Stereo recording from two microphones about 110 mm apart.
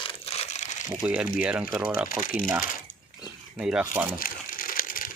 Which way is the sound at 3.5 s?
5° right (ahead or behind).